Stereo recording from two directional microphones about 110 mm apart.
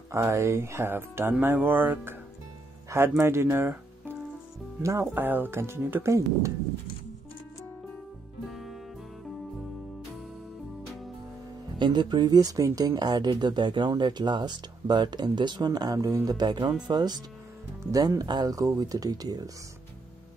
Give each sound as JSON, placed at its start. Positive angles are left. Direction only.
{"t": 0.1, "sound": "speech", "side_deg": -25}
{"t": 8.5, "sound": "music", "side_deg": 0}
{"t": 11.8, "sound": "speech", "side_deg": -40}